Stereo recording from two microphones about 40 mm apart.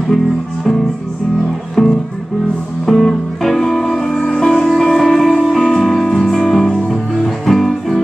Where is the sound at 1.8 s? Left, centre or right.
Centre.